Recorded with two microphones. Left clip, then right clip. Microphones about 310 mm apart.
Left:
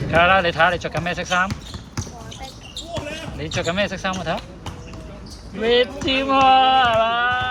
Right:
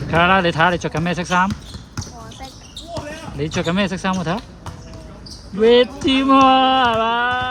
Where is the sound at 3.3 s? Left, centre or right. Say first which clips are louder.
Right 2 dB; centre.